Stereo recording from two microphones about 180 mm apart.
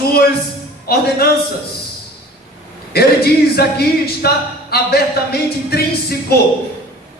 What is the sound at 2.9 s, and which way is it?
Speech, 60° left (ahead or behind).